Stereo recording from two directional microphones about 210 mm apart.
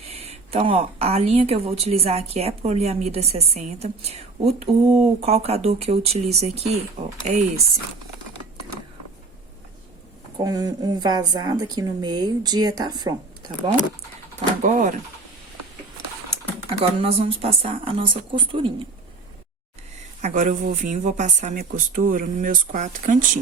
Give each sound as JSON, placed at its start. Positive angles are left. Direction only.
{"t": 0.1, "sound": "speech", "side_deg": -30}
{"t": 10.3, "sound": "speech", "side_deg": -20}
{"t": 14.6, "sound": "speech", "side_deg": -40}
{"t": 16.6, "sound": "speech", "side_deg": -25}
{"t": 20.2, "sound": "speech", "side_deg": -35}